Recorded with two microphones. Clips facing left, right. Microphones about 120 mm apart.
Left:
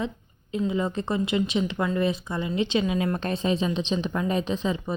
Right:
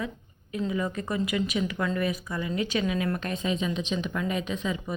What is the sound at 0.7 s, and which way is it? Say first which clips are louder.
Speech: left 2 dB; 25° left (ahead or behind).